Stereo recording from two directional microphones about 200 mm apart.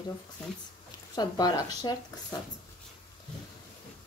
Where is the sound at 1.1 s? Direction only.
20° left (ahead or behind).